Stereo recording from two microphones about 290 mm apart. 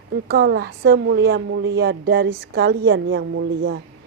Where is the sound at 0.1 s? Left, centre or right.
Right.